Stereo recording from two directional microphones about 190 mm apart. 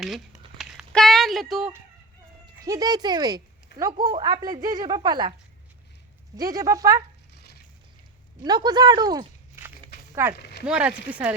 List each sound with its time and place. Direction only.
0.6 s a sound: centre (ahead or behind)
2.6 s speech: 20° right (ahead or behind)
6.3 s speech: 20° right (ahead or behind)
7.3 s stir: 60° left (ahead or behind)
8.4 s speech: 20° right (ahead or behind)